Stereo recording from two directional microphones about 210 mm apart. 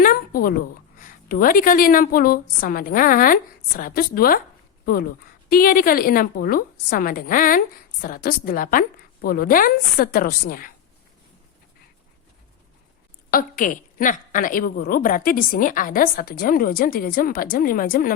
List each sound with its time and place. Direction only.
0.0 s a woman's voice: 45° left (ahead or behind)
13.3 s a woman's voice: 40° left (ahead or behind)